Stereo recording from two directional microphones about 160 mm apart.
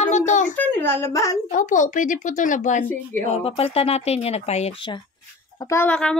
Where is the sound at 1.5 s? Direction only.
55° left (ahead or behind).